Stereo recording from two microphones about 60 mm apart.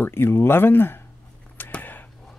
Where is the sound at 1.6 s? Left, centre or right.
Left.